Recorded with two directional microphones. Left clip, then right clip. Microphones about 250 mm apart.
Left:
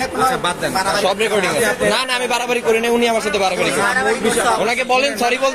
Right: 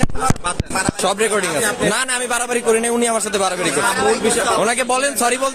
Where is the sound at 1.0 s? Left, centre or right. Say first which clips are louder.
Left 1 dB; right.